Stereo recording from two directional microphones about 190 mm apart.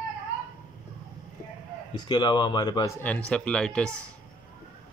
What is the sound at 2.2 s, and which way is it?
Speech, 25° left (ahead or behind).